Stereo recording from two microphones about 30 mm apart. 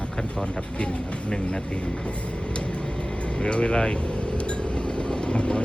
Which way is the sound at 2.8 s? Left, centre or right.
Left.